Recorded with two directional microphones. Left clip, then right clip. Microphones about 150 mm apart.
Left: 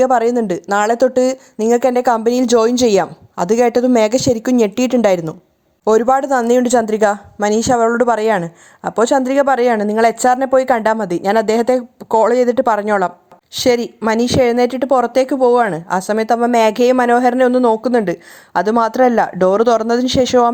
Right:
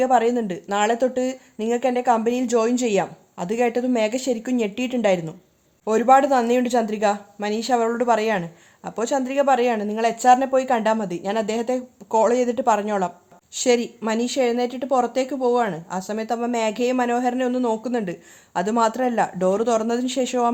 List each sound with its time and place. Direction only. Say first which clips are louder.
0.0 s speech: left 6 dB; 55° left (ahead or behind); by 20.5 s 40° left (ahead or behind)